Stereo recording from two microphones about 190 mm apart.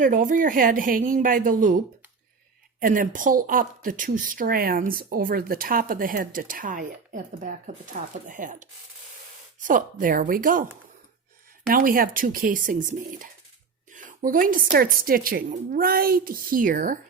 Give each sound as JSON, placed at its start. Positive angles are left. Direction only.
{"t": 0.0, "sound": "speech", "side_deg": -45}
{"t": 2.8, "sound": "speech", "side_deg": -45}
{"t": 11.7, "sound": "speech", "side_deg": -50}
{"t": 13.9, "sound": "a sound", "side_deg": -45}
{"t": 14.7, "sound": "speech", "side_deg": -50}